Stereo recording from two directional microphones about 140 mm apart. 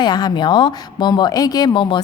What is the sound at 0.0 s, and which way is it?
A woman's voice, 30° left (ahead or behind).